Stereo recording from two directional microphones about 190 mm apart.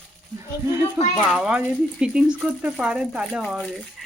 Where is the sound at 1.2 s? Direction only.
5° right (ahead or behind).